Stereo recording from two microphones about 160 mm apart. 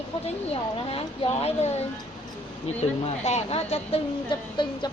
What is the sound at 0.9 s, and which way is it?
Speech, 40° left (ahead or behind).